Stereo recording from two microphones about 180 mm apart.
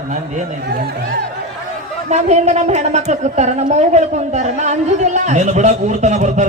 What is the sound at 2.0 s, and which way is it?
A woman's voice, 40° right (ahead or behind).